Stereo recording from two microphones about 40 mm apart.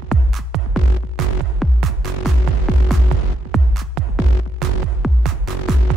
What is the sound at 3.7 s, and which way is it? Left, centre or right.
Music, centre.